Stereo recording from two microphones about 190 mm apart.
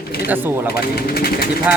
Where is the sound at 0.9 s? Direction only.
55° left (ahead or behind).